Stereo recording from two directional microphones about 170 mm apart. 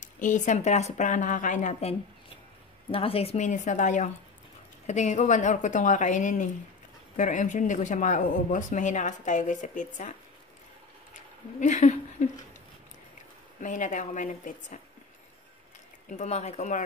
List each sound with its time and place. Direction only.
0.0 s speech: 50° left (ahead or behind)
11.1 s a sound: 45° left (ahead or behind)
13.6 s speech: 50° left (ahead or behind)
16.1 s speech: 40° left (ahead or behind)